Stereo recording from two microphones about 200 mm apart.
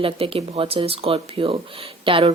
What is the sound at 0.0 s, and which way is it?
Speech, 30° right (ahead or behind).